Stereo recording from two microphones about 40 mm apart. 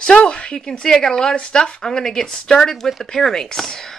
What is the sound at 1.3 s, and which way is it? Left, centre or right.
Speech, left.